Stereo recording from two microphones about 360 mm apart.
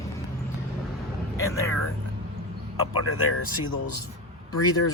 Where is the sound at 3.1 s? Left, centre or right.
Left.